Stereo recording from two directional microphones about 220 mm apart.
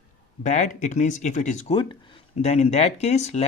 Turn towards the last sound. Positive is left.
turn(degrees=30)  # may be behind; listen again after turning